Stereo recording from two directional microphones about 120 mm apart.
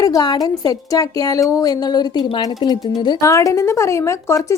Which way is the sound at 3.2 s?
25° left (ahead or behind).